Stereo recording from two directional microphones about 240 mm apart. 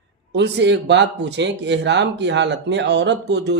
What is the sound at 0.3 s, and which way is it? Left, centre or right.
Speech, right.